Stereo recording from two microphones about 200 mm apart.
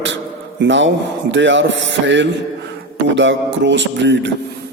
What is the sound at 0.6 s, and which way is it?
Speech, 65° right (ahead or behind).